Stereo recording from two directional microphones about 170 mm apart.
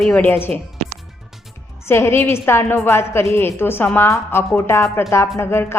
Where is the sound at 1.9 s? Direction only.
15° left (ahead or behind).